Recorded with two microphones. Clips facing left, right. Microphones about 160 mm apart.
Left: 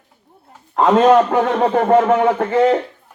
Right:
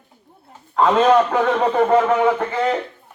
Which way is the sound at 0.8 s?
40° left (ahead or behind).